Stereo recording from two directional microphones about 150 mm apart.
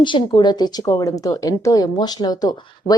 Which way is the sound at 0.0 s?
30° left (ahead or behind).